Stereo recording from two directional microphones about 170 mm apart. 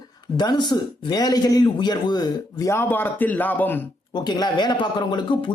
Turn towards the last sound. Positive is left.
turn(degrees=25)  # may be behind; listen again after turning